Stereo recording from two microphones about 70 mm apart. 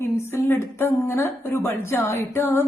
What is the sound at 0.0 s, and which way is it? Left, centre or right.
A woman's voice, left.